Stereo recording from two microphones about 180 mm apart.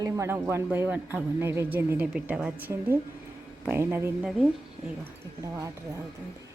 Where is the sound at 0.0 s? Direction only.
15° right (ahead or behind).